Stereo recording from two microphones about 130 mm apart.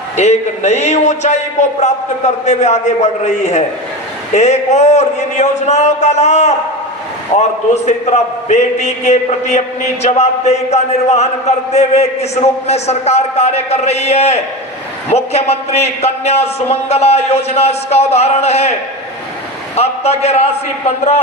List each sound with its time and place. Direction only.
0.2 s a man's voice: 60° left (ahead or behind)
19.7 s a man's voice: 55° left (ahead or behind)